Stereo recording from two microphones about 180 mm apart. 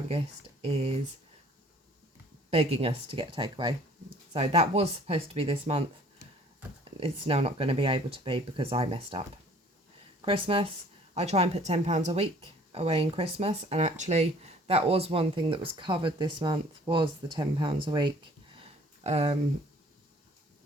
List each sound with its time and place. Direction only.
0.6 s speech: 35° right (ahead or behind)
2.5 s speech: 35° right (ahead or behind)
4.4 s speech: 35° right (ahead or behind)
7.0 s speech: 35° right (ahead or behind)
18.5 s a sound: 35° right (ahead or behind)